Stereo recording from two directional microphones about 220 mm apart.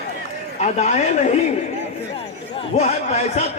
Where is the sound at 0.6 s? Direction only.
30° left (ahead or behind).